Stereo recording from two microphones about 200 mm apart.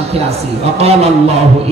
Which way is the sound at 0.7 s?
30° right (ahead or behind).